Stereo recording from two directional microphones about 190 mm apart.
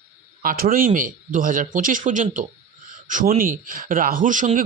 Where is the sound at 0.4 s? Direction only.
50° right (ahead or behind).